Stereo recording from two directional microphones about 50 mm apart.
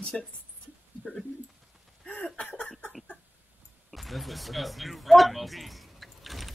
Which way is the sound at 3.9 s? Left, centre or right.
Centre.